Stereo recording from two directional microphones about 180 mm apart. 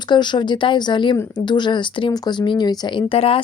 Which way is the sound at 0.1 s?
25° left (ahead or behind).